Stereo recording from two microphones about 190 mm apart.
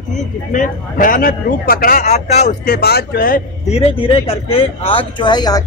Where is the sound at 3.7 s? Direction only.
30° left (ahead or behind).